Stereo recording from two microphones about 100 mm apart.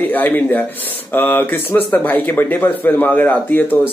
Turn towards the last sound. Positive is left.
turn(degrees=15)  # may be behind; listen again after turning